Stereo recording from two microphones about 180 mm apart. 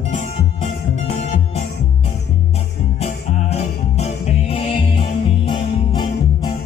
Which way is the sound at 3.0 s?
35° left (ahead or behind).